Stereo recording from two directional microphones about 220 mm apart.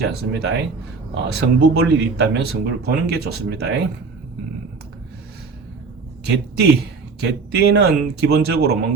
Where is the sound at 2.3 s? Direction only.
45° right (ahead or behind).